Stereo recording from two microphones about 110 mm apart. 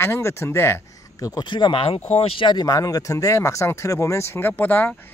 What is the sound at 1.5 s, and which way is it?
Speech, 50° left (ahead or behind).